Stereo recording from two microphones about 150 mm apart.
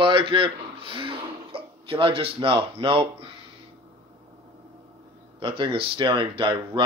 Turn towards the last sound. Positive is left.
turn(degrees=-35)  # may be behind; listen again after turning